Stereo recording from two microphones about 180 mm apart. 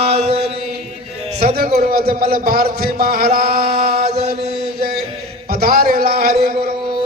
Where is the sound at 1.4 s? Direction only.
55° right (ahead or behind).